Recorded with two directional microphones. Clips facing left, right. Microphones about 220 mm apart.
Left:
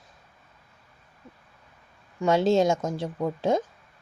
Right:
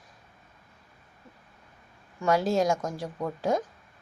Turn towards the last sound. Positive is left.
turn(degrees=25)  # may be behind; listen again after turning